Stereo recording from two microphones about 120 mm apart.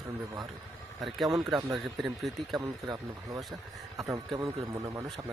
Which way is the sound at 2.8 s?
35° right (ahead or behind).